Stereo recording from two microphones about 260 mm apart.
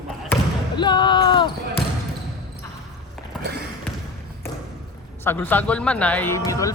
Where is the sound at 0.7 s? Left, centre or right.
Centre.